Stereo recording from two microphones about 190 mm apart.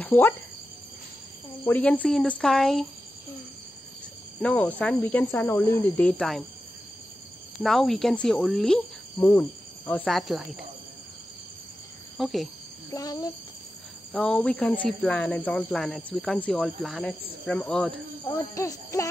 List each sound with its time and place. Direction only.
0.0 s speech: 10° left (ahead or behind)
1.6 s speech: 10° left (ahead or behind)
4.4 s speech: 10° left (ahead or behind)
7.6 s speech: centre (ahead or behind)
12.2 s speech: centre (ahead or behind)
12.9 s a child's voice: 20° left (ahead or behind)
14.1 s speech: 5° left (ahead or behind)
18.3 s speech: 20° left (ahead or behind)